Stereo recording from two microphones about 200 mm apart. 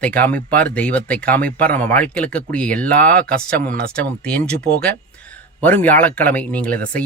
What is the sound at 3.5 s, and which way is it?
Speech, 50° right (ahead or behind).